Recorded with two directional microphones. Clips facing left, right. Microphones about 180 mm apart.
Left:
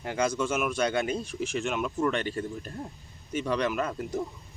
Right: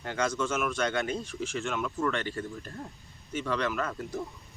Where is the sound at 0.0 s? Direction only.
10° left (ahead or behind).